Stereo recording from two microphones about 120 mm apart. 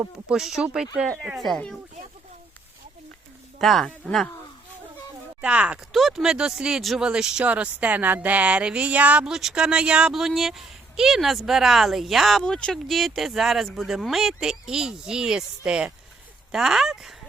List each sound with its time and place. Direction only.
0.3 s speech: 5° right (ahead or behind)
3.6 s speech: centre (ahead or behind)
5.4 s speech: 10° right (ahead or behind)